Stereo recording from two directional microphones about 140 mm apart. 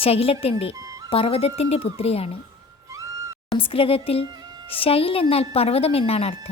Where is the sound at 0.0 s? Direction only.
45° left (ahead or behind).